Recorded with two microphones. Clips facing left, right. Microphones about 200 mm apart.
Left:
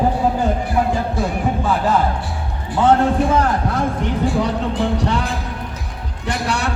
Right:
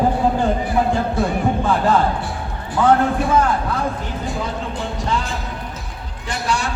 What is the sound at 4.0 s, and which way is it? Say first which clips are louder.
Music: left 7 dB; 65° left (ahead or behind).